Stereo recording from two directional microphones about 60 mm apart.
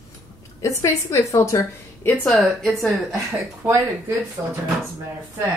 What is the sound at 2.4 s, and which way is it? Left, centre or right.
Speech, centre.